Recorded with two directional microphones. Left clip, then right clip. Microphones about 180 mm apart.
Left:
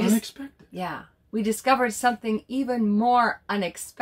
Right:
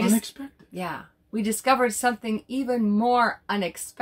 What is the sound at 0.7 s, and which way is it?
A woman's voice, 15° right (ahead or behind).